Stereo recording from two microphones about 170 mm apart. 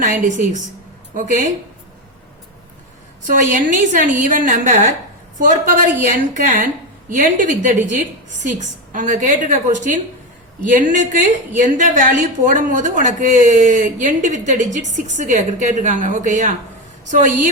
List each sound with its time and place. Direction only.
0.0 s a woman's voice: 45° right (ahead or behind)
3.2 s a woman's voice: 50° right (ahead or behind)